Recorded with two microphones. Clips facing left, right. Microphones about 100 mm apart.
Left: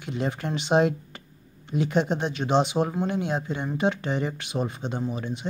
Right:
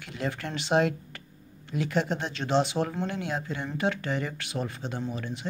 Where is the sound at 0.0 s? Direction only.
20° left (ahead or behind).